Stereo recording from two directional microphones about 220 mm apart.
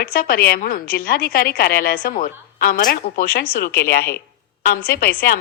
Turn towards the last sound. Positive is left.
turn(degrees=40)  # may be behind; listen again after turning